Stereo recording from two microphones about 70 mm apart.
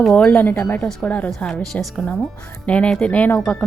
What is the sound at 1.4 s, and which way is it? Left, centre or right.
A woman's voice, centre.